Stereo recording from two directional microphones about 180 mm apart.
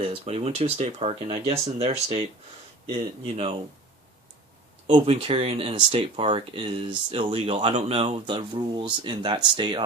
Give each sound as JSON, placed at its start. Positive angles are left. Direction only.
{"t": 0.0, "sound": "speech", "side_deg": -35}
{"t": 4.9, "sound": "speech", "side_deg": -30}